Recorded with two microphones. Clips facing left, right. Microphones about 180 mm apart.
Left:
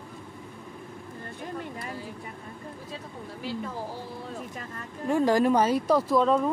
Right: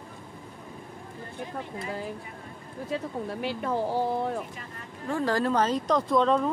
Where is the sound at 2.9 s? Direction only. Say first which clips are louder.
Right 8 dB; 65° right (ahead or behind).